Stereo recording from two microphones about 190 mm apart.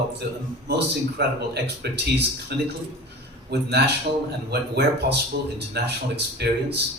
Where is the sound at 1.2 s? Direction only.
60° right (ahead or behind).